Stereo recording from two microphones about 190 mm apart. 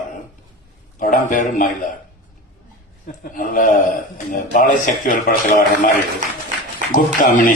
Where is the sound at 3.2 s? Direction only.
45° left (ahead or behind).